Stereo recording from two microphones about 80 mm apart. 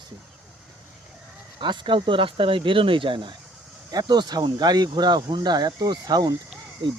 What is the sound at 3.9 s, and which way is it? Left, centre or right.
Speech, right.